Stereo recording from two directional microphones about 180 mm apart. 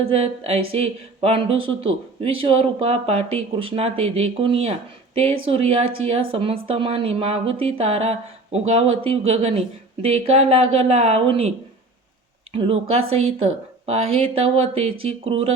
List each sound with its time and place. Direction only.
0.1 s speech: 35° right (ahead or behind)
12.5 s speech: 30° right (ahead or behind)